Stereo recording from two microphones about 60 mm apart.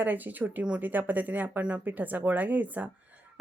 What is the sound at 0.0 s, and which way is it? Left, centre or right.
A woman's voice, right.